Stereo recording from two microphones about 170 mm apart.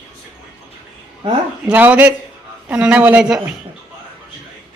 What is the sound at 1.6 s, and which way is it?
A woman's voice, 10° right (ahead or behind).